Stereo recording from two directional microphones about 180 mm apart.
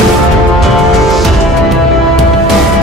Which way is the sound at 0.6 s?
Centre (ahead or behind).